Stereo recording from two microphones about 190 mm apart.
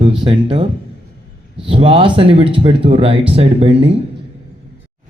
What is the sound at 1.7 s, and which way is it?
Speech, 30° right (ahead or behind).